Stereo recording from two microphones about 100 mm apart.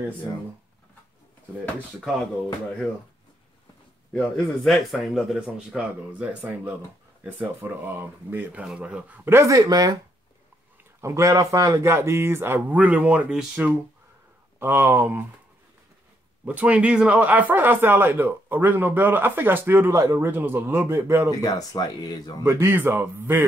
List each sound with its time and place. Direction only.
4.1 s a man's voice: 15° left (ahead or behind)
4.6 s speech: centre (ahead or behind)
9.3 s speech: 30° right (ahead or behind)
11.0 s speech: 30° right (ahead or behind); by 13.7 s 10° right (ahead or behind)
14.6 s speech: 20° right (ahead or behind)
16.4 s speech: 15° right (ahead or behind)
21.4 s speech: 40° left (ahead or behind)
22.4 s speech: 25° right (ahead or behind)